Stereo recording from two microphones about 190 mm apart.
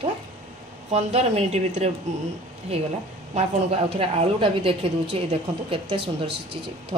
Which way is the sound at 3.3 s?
35° right (ahead or behind).